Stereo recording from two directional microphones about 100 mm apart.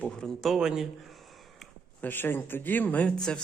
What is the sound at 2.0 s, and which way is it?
Speech, 20° left (ahead or behind).